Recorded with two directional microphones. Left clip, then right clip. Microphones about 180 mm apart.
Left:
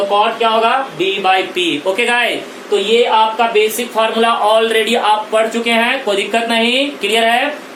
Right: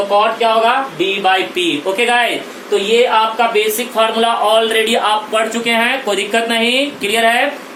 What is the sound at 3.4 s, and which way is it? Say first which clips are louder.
Speech: left 1 dB; 15° left (ahead or behind).